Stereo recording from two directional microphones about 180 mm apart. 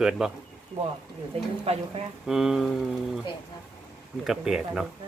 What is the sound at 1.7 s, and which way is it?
Speech, 35° right (ahead or behind).